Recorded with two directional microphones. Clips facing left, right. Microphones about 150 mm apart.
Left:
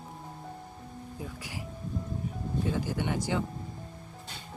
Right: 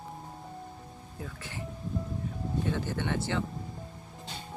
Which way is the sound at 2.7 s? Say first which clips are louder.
Left 1 dB; 10° left (ahead or behind).